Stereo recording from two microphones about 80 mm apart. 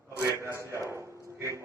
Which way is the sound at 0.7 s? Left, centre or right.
Right.